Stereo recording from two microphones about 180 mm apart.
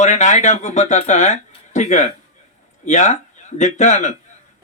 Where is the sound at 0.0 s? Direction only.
40° left (ahead or behind).